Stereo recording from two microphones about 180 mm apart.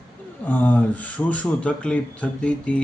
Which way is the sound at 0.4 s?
10° left (ahead or behind).